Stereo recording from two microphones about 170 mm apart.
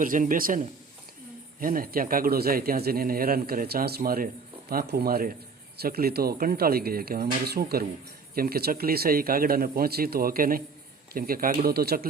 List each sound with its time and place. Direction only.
0.0 s a man's voice: 50° right (ahead or behind)